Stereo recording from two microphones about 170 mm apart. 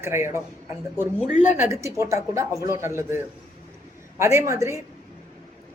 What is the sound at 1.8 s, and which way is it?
Speech, 15° right (ahead or behind).